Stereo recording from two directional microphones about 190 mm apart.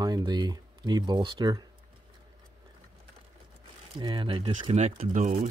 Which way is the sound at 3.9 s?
25° right (ahead or behind).